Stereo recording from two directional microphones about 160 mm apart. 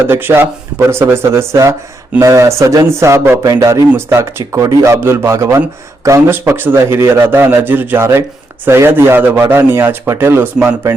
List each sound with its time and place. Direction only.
0.0 s speech: 15° right (ahead or behind)